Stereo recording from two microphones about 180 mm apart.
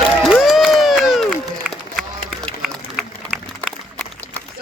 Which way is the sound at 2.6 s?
Centre (ahead or behind).